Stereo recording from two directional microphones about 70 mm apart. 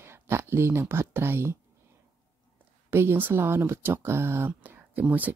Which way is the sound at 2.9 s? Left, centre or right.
Right.